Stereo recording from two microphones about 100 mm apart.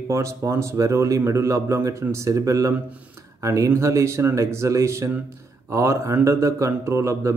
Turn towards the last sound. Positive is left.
turn(degrees=-30)  # may be behind; listen again after turning